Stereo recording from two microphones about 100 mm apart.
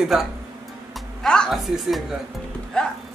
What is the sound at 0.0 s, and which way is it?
Speech, 5° right (ahead or behind).